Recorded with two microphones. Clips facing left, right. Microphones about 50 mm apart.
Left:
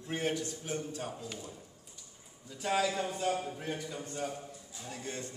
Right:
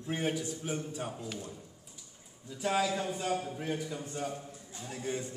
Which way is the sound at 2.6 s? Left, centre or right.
Centre.